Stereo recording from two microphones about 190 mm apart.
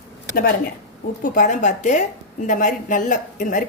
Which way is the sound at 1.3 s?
40° left (ahead or behind).